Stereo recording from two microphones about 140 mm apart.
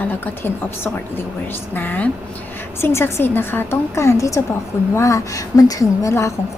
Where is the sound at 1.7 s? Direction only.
10° left (ahead or behind).